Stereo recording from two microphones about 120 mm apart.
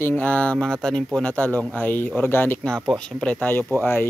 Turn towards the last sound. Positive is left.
turn(degrees=20)  # may be behind; listen again after turning